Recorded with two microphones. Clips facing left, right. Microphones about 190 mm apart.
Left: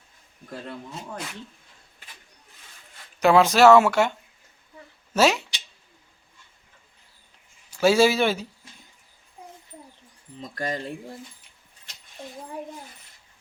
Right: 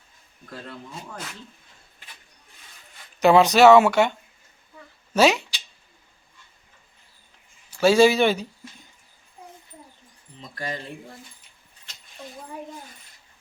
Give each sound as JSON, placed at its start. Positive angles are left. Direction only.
{"t": 3.2, "sound": "speech", "side_deg": 0}
{"t": 5.1, "sound": "speech", "side_deg": 0}
{"t": 7.8, "sound": "speech", "side_deg": 10}
{"t": 10.4, "sound": "speech", "side_deg": 45}